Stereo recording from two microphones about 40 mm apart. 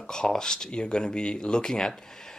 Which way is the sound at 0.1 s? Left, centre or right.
Centre.